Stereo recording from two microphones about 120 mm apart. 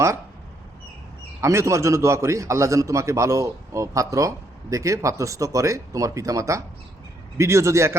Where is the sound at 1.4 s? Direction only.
25° right (ahead or behind).